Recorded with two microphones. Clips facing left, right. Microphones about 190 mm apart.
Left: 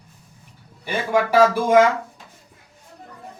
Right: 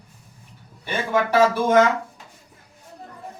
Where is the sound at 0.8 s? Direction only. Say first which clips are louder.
Left 2 dB; 10° left (ahead or behind).